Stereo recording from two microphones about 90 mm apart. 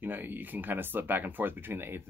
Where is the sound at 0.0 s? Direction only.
20° right (ahead or behind).